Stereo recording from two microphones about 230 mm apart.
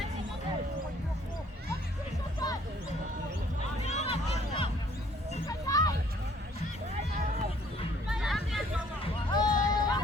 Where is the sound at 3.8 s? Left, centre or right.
Left.